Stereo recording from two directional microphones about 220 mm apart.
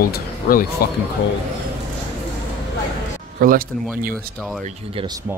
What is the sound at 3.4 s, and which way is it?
Speech, 40° right (ahead or behind).